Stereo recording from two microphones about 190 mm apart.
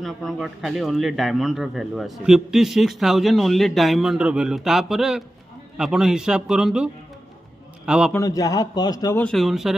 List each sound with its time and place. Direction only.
0.0 s a man's voice: centre (ahead or behind)
8.1 s a man's voice: 15° left (ahead or behind)
9.2 s a man's voice: centre (ahead or behind)